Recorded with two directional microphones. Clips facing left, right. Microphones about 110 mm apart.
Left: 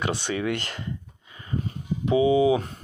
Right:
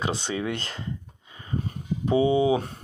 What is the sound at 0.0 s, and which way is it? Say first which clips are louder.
Speech: left 1 dB; 25° right (ahead or behind).